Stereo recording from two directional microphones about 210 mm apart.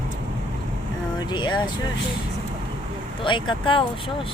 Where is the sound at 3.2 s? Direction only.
25° left (ahead or behind).